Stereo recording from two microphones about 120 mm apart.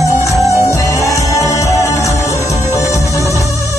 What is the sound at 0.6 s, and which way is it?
Music, 25° left (ahead or behind).